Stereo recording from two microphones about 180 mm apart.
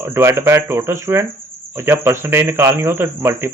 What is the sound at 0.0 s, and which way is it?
Speech, 15° right (ahead or behind).